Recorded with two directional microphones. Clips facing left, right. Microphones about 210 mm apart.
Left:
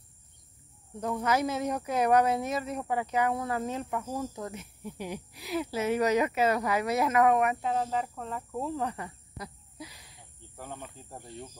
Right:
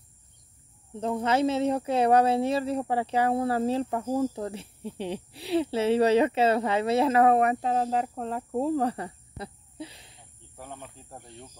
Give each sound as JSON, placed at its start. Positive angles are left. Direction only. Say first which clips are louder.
{"t": 0.9, "sound": "speech", "louder": "right 3 dB", "side_deg": -25}
{"t": 10.6, "sound": "speech", "louder": "even", "side_deg": 0}